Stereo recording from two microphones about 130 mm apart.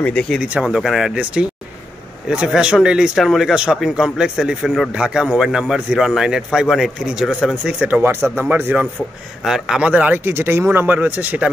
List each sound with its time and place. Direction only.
0.0 s speech: 5° left (ahead or behind)
0.4 s speech: 5° right (ahead or behind)